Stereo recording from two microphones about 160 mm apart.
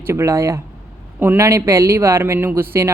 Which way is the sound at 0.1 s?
20° right (ahead or behind).